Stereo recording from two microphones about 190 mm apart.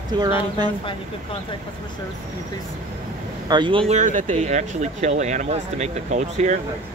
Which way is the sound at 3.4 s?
25° right (ahead or behind).